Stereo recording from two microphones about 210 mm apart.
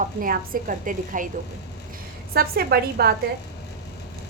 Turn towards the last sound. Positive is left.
turn(degrees=-50)  # may be behind; listen again after turning